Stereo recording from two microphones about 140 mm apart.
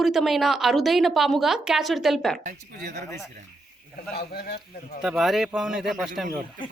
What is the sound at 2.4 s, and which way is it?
Speech, 80° right.